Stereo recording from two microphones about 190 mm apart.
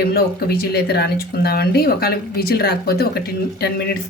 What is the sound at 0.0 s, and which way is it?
Speech, 55° left (ahead or behind).